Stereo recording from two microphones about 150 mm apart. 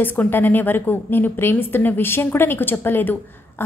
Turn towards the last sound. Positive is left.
turn(degrees=15)  # may be behind; listen again after turning